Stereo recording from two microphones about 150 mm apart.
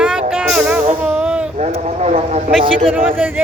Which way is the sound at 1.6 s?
45° right (ahead or behind).